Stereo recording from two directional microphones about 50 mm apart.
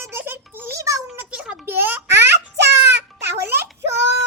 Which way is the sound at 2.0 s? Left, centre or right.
Right.